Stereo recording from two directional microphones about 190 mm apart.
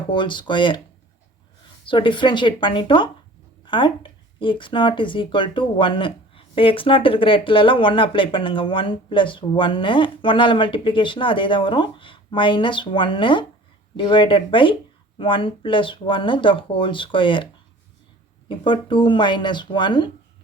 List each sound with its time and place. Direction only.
0.1 s speech: 25° left (ahead or behind)
1.8 s speech: 25° left (ahead or behind)